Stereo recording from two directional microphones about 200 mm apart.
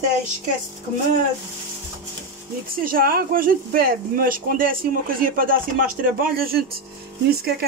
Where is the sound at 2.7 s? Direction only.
45° right (ahead or behind).